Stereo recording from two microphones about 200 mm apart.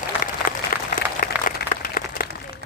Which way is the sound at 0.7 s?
45° left (ahead or behind).